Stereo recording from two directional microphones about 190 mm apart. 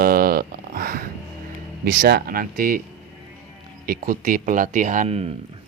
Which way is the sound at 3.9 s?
45° right (ahead or behind).